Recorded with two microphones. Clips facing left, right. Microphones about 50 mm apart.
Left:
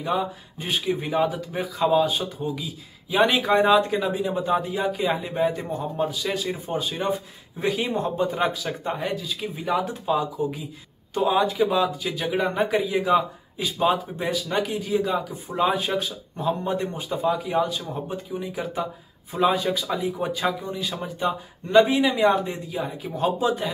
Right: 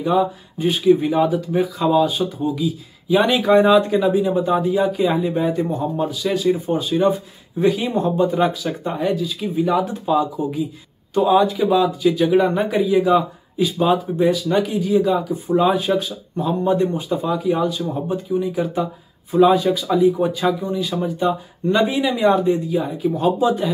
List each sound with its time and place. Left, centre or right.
0.0 s speech: centre
6.8 s speech: left
14.3 s speech: left
19.5 s speech: left; by 23.2 s centre
23.2 s speech: left